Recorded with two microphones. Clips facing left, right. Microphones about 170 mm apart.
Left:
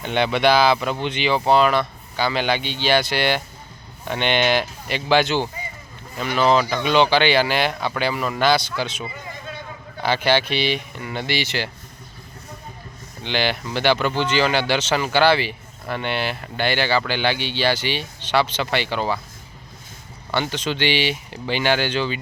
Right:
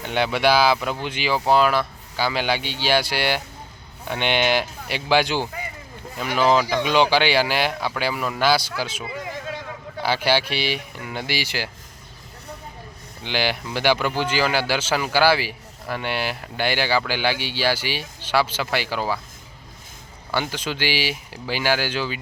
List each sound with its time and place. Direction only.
0.0 s speech: 5° right (ahead or behind)
9.1 s a sound: 90° right
10.0 s speech: 10° right (ahead or behind)
13.2 s speech: 10° right (ahead or behind)
20.3 s speech: 10° right (ahead or behind)